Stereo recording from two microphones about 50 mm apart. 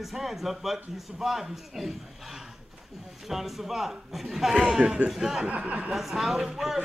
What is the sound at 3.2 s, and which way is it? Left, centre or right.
A man's voice, centre.